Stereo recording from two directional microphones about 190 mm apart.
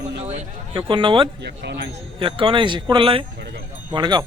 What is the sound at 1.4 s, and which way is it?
Speech, 60° right (ahead or behind).